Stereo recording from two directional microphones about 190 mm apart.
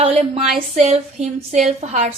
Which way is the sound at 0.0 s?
35° right (ahead or behind).